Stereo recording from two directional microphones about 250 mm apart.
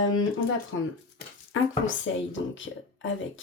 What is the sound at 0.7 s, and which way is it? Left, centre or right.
A woman's voice, left.